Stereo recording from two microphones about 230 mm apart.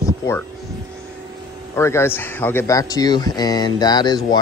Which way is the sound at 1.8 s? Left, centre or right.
Centre.